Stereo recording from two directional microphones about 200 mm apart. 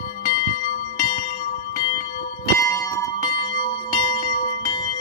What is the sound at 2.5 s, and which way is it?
Music, 15° left (ahead or behind).